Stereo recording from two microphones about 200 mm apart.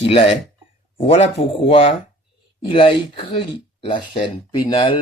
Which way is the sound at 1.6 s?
30° left (ahead or behind).